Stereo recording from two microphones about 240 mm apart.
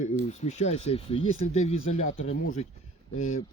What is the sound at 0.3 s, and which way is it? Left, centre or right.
Snort, left.